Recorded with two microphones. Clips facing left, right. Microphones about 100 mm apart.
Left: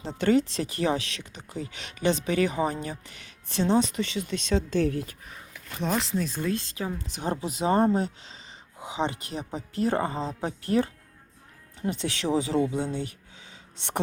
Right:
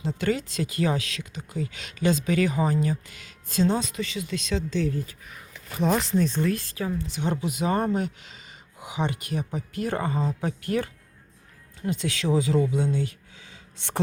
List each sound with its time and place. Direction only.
0.0 s speech: 30° left (ahead or behind)
4.7 s speech: 60° left (ahead or behind)
5.6 s speech: 5° right (ahead or behind)
6.4 s speech: 25° left (ahead or behind)
7.2 s speech: 35° left (ahead or behind); by 14.0 s 20° left (ahead or behind)